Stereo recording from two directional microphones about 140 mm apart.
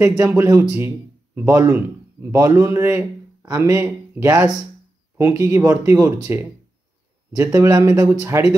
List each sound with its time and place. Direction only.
0.2 s a man's voice: 20° right (ahead or behind)
8.1 s a man's voice: 10° right (ahead or behind)